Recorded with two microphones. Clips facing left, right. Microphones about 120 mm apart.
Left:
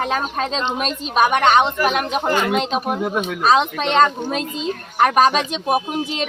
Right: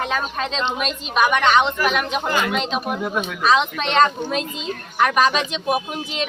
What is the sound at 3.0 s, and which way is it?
Speech, 20° left (ahead or behind).